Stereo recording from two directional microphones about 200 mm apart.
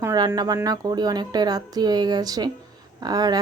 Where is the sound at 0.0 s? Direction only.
15° right (ahead or behind).